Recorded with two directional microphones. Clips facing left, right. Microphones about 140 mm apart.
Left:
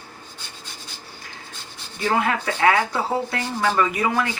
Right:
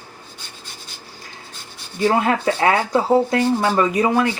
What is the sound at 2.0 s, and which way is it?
Speech, 30° right (ahead or behind).